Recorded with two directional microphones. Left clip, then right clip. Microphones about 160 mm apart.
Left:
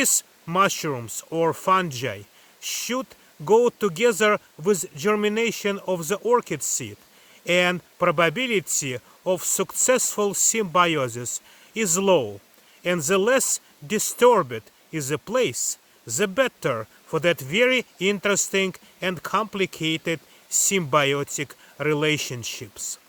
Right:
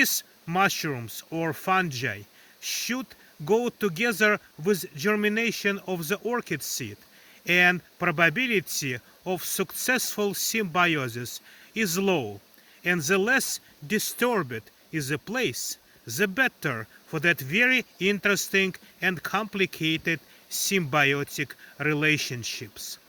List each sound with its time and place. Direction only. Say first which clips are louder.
0.0 s speech: even; 40° left (ahead or behind)